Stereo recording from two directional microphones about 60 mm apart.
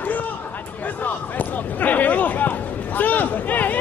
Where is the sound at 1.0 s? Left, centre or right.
Left.